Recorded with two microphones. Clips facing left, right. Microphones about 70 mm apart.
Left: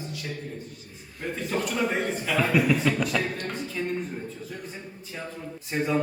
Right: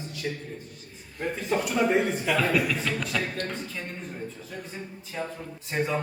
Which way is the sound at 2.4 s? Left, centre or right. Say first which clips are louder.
Left 5 dB; centre.